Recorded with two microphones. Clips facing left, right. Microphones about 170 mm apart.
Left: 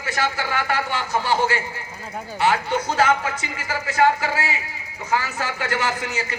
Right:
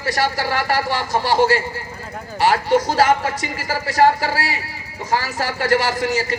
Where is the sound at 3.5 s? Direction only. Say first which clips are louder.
Right 4 dB; 35° right (ahead or behind).